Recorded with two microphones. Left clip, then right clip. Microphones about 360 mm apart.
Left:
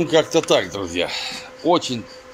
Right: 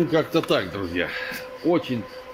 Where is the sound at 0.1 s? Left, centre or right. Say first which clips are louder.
Left 5 dB; left.